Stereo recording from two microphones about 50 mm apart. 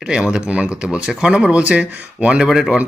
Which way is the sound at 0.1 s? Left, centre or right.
Centre.